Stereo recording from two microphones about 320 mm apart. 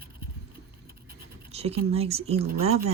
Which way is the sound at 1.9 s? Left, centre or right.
Centre.